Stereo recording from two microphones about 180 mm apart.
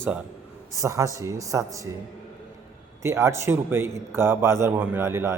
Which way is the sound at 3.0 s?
15° right (ahead or behind).